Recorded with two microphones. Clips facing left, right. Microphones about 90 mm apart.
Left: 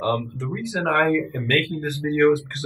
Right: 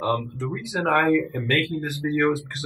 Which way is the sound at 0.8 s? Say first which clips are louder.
Even; 10° right (ahead or behind).